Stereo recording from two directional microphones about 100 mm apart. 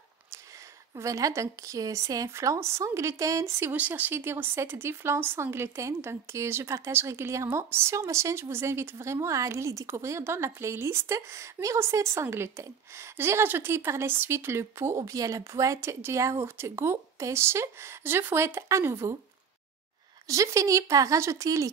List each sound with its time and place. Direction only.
0.9 s a woman's voice: 35° right (ahead or behind)
3.7 s speech: 15° right (ahead or behind)
20.2 s a woman's voice: 30° right (ahead or behind)